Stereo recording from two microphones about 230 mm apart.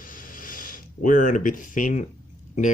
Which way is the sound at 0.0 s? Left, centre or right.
Left.